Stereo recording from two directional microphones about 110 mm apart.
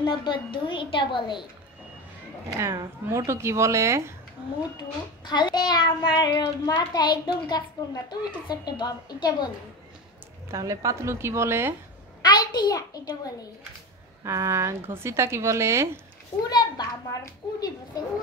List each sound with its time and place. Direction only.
0.0 s a woman's voice: 40° left (ahead or behind)
2.6 s speech: 25° right (ahead or behind)
4.7 s a child's voice: 45° left (ahead or behind)
10.5 s speech: 30° right (ahead or behind)
12.2 s a child's voice: 40° left (ahead or behind)
14.2 s speech: 25° right (ahead or behind)
16.4 s a child's voice: 40° left (ahead or behind)